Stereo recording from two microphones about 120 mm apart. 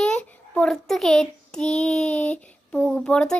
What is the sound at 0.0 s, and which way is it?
A child's voice, 10° left (ahead or behind).